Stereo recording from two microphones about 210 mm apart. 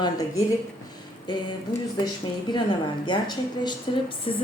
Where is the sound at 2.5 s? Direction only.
20° left (ahead or behind).